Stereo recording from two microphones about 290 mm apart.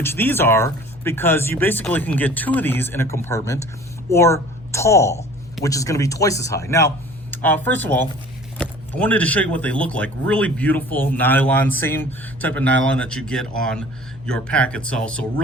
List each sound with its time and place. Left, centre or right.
0.0 s a woman's voice: centre